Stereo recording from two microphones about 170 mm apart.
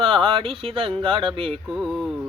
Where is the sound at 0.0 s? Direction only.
30° right (ahead or behind).